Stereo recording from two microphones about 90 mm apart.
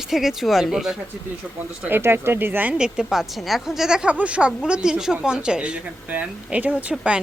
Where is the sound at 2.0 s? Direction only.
25° right (ahead or behind); by 7.2 s 10° right (ahead or behind).